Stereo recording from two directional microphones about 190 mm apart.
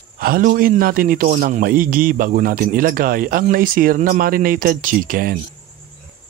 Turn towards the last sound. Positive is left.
turn(degrees=-45)  # may be behind; listen again after turning